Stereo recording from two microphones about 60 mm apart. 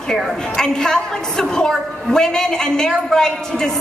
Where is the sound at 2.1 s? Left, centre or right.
Centre.